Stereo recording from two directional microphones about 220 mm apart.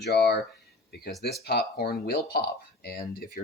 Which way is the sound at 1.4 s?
45° left (ahead or behind).